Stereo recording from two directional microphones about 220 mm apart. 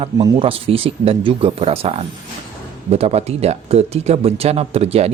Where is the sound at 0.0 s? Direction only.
25° right (ahead or behind).